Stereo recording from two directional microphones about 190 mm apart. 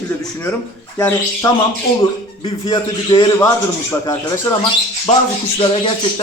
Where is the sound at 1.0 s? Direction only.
15° left (ahead or behind).